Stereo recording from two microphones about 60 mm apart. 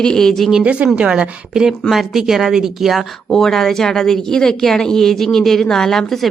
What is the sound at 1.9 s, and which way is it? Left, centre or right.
Speech, centre.